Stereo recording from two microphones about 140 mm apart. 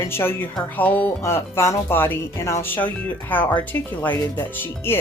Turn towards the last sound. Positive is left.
turn(degrees=15)  # may be behind; listen again after turning